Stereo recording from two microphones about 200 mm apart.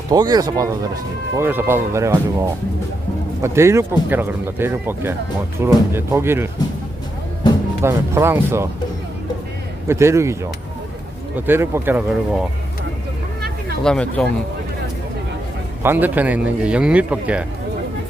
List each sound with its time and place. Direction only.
0.1 s speech: 20° right (ahead or behind)
7.8 s speech: 10° right (ahead or behind)
9.8 s speech: 15° right (ahead or behind)
13.8 s speech: 5° left (ahead or behind)
15.8 s speech: 10° right (ahead or behind)